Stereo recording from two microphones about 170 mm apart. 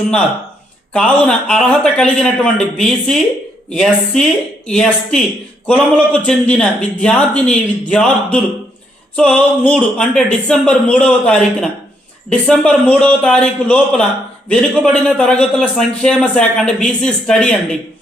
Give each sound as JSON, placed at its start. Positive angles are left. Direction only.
{"t": 0.9, "sound": "a man's voice", "side_deg": 5}